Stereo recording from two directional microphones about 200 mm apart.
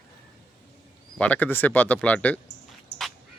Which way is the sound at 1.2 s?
10° left (ahead or behind).